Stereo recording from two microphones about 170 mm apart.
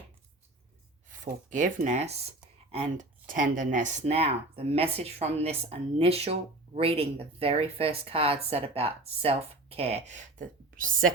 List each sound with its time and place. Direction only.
1.2 s speech: 50° right (ahead or behind)